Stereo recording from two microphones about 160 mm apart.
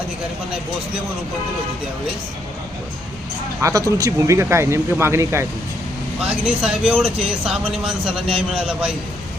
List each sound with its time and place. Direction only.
3.6 s speech: 20° right (ahead or behind)
6.2 s speech: 5° right (ahead or behind)